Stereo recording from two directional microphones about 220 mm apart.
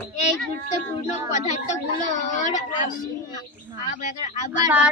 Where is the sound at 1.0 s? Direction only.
30° left (ahead or behind).